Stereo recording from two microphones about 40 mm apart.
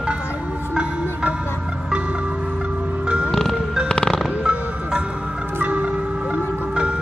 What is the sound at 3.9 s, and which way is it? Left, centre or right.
Music, left.